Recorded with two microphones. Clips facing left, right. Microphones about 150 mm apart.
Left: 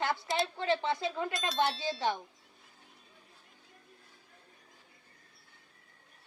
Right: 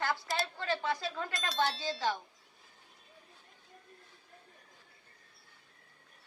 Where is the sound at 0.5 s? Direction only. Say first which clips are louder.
Left 3 dB; 20° left (ahead or behind).